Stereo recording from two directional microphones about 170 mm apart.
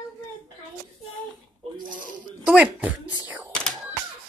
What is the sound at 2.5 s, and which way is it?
Speech, 10° right (ahead or behind).